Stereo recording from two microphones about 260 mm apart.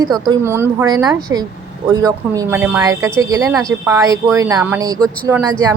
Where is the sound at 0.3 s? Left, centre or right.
Centre.